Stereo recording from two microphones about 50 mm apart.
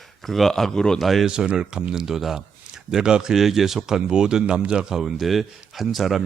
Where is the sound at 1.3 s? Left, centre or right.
Centre.